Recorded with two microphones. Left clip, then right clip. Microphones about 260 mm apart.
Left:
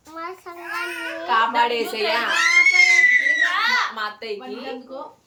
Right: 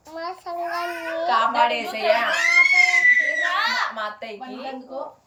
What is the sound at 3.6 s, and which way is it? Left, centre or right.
A child's voice, centre.